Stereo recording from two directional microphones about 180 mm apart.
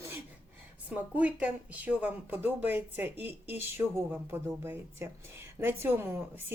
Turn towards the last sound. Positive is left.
turn(degrees=-10)  # may be behind; listen again after turning